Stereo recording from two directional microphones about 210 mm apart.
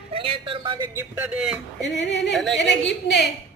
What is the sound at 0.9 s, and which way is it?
Speech, 10° right (ahead or behind).